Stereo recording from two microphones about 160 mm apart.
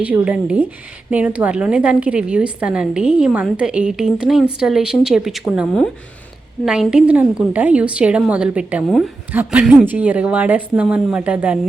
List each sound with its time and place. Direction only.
0.0 s a woman's voice: 10° right (ahead or behind)